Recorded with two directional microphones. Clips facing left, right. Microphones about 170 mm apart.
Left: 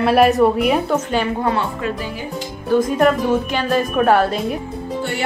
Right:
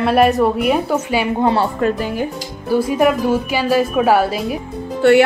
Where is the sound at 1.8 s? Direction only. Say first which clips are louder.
Right 6 dB; 55° right (ahead or behind).